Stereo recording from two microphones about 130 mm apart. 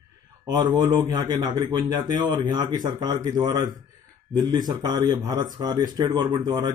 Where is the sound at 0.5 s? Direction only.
30° right (ahead or behind).